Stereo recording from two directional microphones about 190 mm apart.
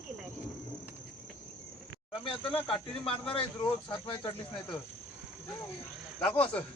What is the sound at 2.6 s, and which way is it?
Speech, 30° left (ahead or behind).